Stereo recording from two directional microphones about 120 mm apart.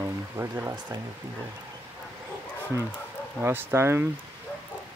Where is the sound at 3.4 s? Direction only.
20° right (ahead or behind).